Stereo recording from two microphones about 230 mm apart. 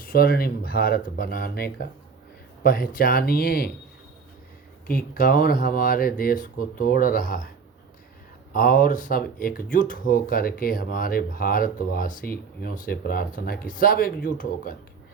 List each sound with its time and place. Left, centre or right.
0.0 s speech: left
4.9 s speech: left
8.5 s speech: left